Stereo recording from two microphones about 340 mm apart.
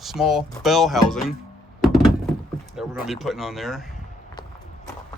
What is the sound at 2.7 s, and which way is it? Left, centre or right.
Speech, centre.